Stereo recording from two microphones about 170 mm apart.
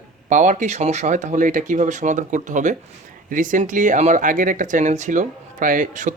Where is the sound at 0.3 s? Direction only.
45° right (ahead or behind).